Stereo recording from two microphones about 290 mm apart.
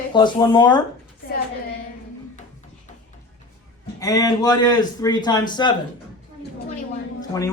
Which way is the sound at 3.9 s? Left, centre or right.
Centre.